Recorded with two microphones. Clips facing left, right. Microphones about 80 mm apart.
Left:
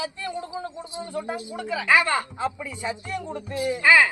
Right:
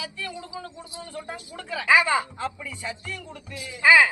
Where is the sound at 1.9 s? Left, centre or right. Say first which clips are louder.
Right 1 dB; centre.